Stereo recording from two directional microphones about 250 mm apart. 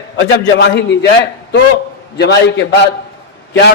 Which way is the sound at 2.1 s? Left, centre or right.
Left.